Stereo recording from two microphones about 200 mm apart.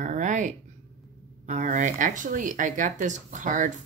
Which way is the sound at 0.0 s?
40° right (ahead or behind).